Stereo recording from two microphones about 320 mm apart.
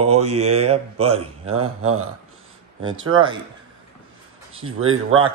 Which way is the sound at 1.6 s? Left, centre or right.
Right.